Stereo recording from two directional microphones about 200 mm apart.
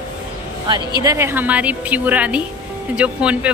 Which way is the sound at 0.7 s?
25° right (ahead or behind).